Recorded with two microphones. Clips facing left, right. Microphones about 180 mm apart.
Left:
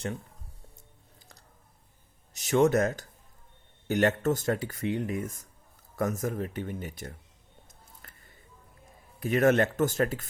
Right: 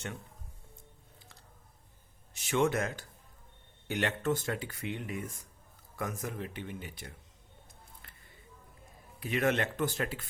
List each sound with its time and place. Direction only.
2.3 s speech: 40° left (ahead or behind)
8.0 s a sound: 45° left (ahead or behind)
9.2 s speech: 45° left (ahead or behind)